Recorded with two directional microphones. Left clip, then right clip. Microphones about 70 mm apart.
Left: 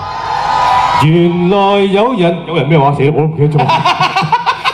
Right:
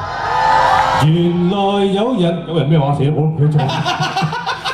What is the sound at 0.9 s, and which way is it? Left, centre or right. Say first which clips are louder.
Speech: left 5 dB; left.